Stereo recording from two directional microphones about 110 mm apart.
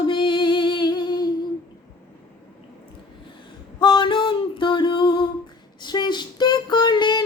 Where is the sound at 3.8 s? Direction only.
45° left (ahead or behind).